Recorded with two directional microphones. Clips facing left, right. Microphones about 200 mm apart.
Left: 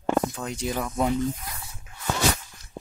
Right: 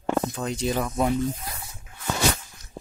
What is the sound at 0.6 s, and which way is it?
Speech, 20° right (ahead or behind).